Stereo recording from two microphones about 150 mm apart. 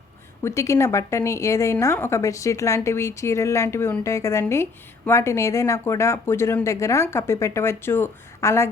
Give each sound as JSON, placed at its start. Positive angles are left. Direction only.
{"t": 0.4, "sound": "a woman's voice", "side_deg": 20}